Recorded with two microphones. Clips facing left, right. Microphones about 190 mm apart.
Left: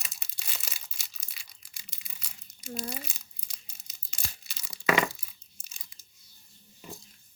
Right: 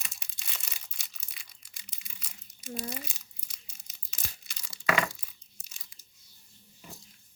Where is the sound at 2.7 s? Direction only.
30° left (ahead or behind).